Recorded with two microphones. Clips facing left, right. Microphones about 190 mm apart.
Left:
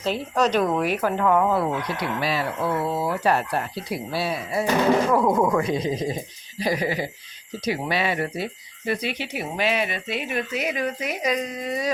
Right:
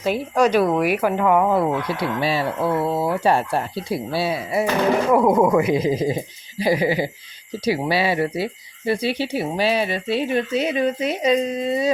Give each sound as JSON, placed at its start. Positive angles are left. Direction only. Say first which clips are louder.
{"t": 0.0, "sound": "speech", "louder": "right 4 dB", "side_deg": -10}